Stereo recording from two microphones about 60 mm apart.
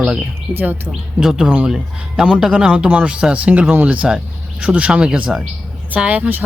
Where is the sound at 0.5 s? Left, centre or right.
Right.